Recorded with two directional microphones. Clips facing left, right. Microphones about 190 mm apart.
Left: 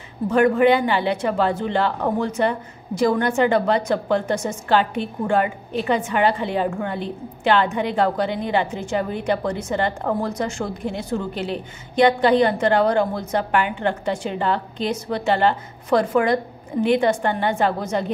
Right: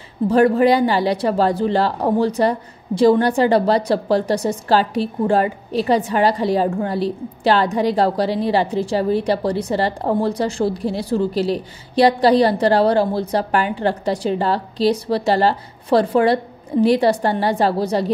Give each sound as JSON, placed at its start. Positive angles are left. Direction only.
{"t": 0.3, "sound": "speech", "side_deg": -35}